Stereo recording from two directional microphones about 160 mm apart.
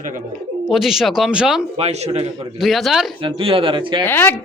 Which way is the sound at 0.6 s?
Centre (ahead or behind).